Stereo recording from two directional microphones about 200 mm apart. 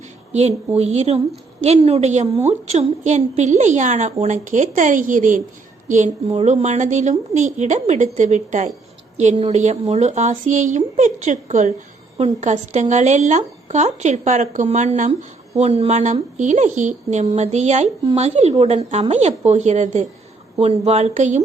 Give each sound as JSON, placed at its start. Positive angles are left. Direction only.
{"t": 0.8, "sound": "a woman's voice", "side_deg": -30}